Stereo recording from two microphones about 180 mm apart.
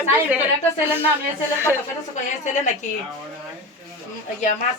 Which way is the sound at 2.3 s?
40° left (ahead or behind).